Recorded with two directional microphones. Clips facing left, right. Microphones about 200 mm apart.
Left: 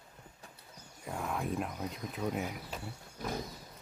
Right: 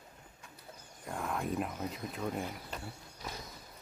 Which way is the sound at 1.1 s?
Centre (ahead or behind).